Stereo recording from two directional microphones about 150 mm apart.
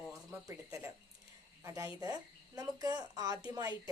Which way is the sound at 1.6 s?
20° right (ahead or behind).